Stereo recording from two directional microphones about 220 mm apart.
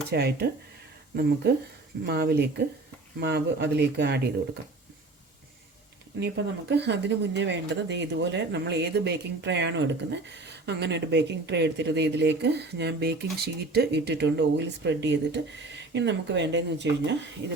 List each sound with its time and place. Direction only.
0.1 s speech: 45° right (ahead or behind)
2.0 s speech: 45° right (ahead or behind)
6.1 s speech: 50° right (ahead or behind)